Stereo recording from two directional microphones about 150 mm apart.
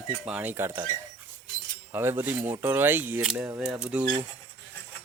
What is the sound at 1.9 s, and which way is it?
Speech, 15° right (ahead or behind).